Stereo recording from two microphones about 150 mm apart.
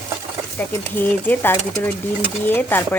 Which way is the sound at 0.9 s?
15° left (ahead or behind).